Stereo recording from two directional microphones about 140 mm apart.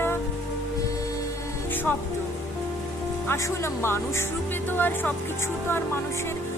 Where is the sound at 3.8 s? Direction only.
15° left (ahead or behind).